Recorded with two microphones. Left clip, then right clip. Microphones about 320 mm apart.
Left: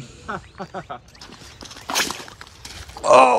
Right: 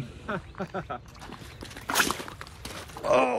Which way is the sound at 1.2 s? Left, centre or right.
Centre.